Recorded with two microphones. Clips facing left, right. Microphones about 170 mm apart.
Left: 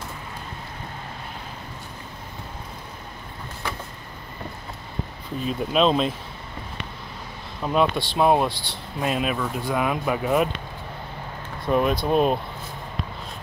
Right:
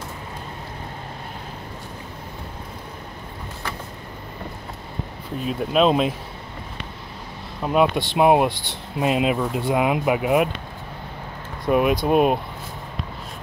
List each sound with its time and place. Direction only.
5.4 s speech: 5° right (ahead or behind)
7.6 s speech: 10° right (ahead or behind)
11.6 s speech: 10° right (ahead or behind)